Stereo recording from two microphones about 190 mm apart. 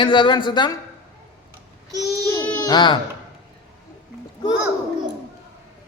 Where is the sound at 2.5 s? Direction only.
20° left (ahead or behind).